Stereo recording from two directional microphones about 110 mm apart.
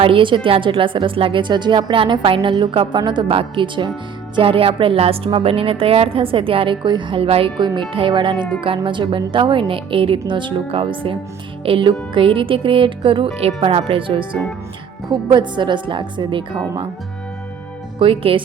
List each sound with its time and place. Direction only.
0.0 s a woman's voice: 50° right (ahead or behind)
18.0 s a woman's voice: 55° right (ahead or behind)